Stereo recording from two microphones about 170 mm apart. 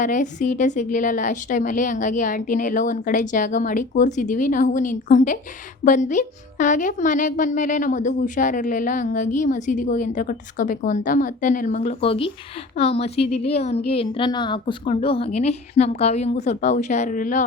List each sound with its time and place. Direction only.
0.0 s a woman's voice: 50° left (ahead or behind)